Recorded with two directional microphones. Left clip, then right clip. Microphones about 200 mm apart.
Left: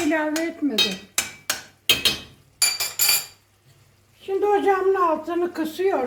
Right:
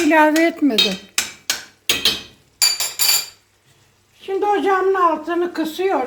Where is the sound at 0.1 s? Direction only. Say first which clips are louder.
Right 10 dB; 45° right (ahead or behind).